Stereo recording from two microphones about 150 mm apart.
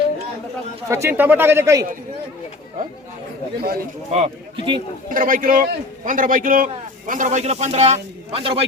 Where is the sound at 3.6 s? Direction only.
90° right.